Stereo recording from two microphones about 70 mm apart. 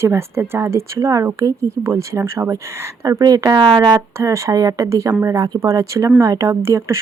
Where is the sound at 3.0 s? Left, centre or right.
Right.